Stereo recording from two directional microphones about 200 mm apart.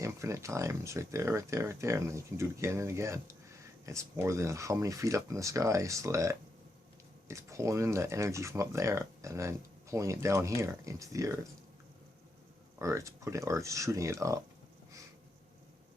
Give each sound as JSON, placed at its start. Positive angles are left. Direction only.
{"t": 0.0, "sound": "speech", "side_deg": -15}
{"t": 12.8, "sound": "speech", "side_deg": -15}